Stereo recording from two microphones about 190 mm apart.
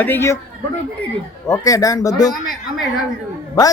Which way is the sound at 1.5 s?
20° left (ahead or behind).